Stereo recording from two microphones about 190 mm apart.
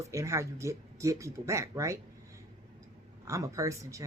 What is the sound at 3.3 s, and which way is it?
Speech, 15° right (ahead or behind).